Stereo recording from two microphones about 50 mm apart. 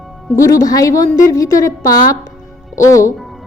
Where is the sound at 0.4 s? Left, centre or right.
Left.